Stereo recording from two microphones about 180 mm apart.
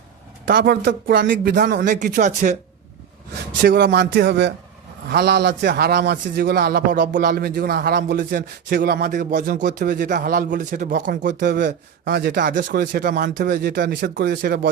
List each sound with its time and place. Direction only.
0.4 s a man's voice: 60° right (ahead or behind)
1.9 s a man's voice: 45° right (ahead or behind)
3.6 s a man's voice: 85° right; by 14.7 s 70° right (ahead or behind)